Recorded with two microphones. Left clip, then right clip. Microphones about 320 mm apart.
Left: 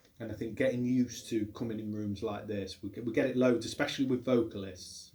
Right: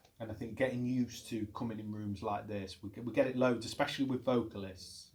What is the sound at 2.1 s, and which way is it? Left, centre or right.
Speech, right.